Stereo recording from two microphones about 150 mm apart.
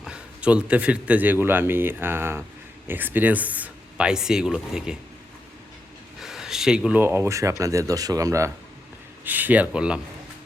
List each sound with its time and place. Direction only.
0.0 s a man's voice: 5° right (ahead or behind)
6.1 s a man's voice: centre (ahead or behind)